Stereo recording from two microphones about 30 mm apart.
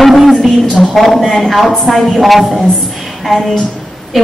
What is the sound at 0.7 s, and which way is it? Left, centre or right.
A woman's voice, centre.